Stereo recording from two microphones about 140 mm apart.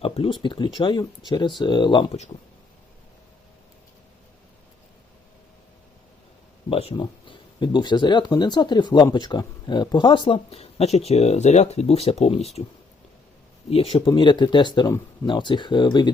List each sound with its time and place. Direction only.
0.0 s speech: 40° left (ahead or behind)
6.7 s speech: 45° left (ahead or behind)
6.9 s speech: 35° left (ahead or behind); by 12.6 s 50° left (ahead or behind)
13.7 s speech: 40° left (ahead or behind)